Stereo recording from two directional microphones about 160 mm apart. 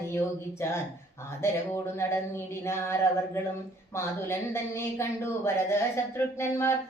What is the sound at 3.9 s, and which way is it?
Speech, 15° left (ahead or behind).